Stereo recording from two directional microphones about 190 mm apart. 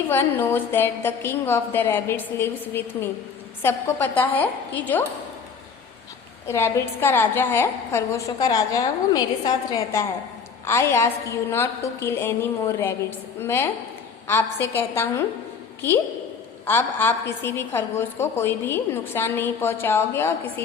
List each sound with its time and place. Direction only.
0.1 s a woman's voice: 10° left (ahead or behind)
6.5 s a woman's voice: 15° left (ahead or behind)
16.6 s a woman's voice: 10° left (ahead or behind)